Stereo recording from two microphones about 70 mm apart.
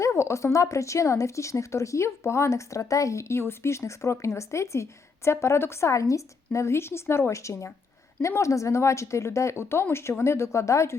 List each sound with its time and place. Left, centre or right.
0.0 s speech: left